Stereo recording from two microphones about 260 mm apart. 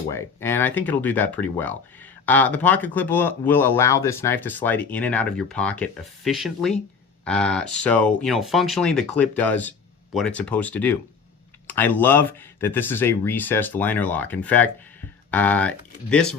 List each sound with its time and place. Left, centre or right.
0.1 s speech: centre